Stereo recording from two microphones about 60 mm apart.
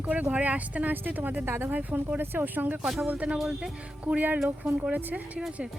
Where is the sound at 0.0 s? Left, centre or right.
Right.